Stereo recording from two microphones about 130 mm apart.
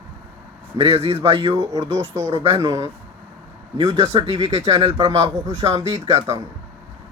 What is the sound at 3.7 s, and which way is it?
A man's voice, 50° right (ahead or behind).